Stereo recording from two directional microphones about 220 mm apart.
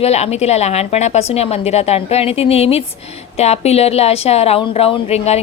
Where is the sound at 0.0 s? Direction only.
30° left (ahead or behind).